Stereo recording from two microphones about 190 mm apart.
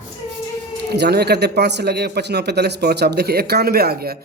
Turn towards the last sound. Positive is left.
turn(degrees=-55)  # may be behind; listen again after turning